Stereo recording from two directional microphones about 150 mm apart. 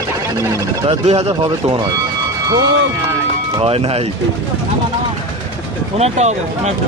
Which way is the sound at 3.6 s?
40° right (ahead or behind).